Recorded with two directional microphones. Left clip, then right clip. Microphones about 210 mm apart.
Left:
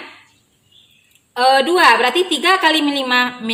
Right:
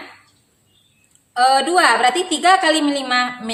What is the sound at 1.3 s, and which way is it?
A woman's voice, 15° right (ahead or behind).